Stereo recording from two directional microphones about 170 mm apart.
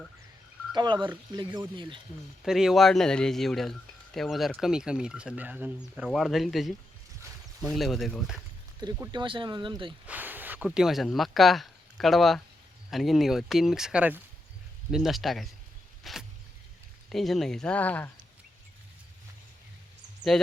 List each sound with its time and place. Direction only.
0.7 s speech: 25° right (ahead or behind)
2.4 s speech: centre (ahead or behind)
8.8 s speech: 25° right (ahead or behind)
10.1 s a sound: 10° right (ahead or behind)
10.7 s speech: centre (ahead or behind)
16.1 s vehicle: centre (ahead or behind)
17.1 s speech: centre (ahead or behind)
20.3 s speech: 5° left (ahead or behind)